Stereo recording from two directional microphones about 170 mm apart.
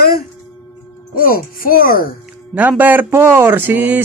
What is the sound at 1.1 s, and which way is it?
Speech, 55° left (ahead or behind).